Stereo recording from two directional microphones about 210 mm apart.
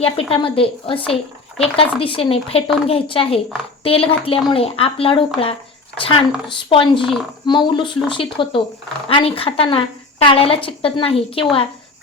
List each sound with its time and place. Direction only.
0.0 s a woman's voice: 25° left (ahead or behind)